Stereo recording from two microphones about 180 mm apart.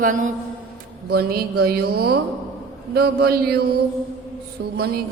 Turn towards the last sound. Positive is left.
turn(degrees=-60)  # may be behind; listen again after turning